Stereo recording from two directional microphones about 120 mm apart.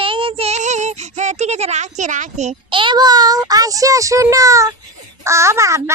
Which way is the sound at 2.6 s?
45° right (ahead or behind).